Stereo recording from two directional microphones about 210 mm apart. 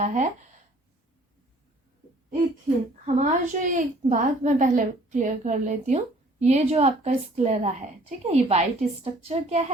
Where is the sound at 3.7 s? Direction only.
40° right (ahead or behind).